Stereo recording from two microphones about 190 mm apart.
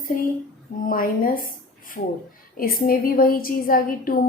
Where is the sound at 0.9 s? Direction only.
45° left (ahead or behind).